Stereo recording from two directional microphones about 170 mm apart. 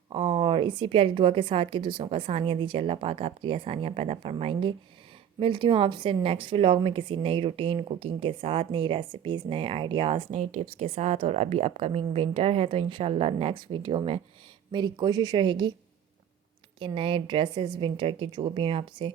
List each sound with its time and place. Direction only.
0.1 s a woman's voice: 30° right (ahead or behind)
16.8 s a woman's voice: 30° right (ahead or behind)